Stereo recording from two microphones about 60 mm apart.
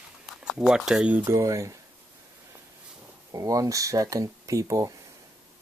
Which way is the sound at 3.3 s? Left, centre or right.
Right.